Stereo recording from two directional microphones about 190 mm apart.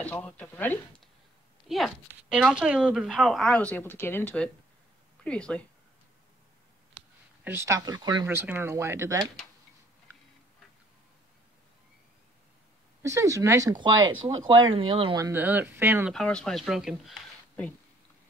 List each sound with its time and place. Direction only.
0.0 s speech: 5° left (ahead or behind)
7.4 s speech: 15° right (ahead or behind)
13.0 s speech: 15° right (ahead or behind)
16.1 s speech: 5° left (ahead or behind)